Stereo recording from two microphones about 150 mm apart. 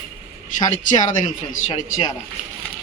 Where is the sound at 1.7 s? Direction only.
40° left (ahead or behind).